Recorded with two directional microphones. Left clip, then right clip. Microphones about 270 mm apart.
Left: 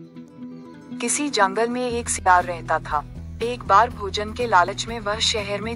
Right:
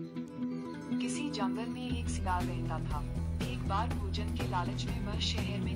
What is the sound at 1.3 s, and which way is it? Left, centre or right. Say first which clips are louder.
Speech: left 17 dB; left.